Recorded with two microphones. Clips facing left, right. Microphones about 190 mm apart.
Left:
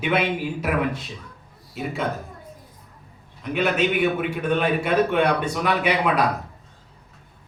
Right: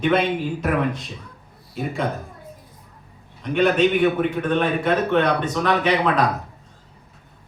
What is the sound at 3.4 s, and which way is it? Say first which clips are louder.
A man's voice: right 4 dB; 5° left (ahead or behind).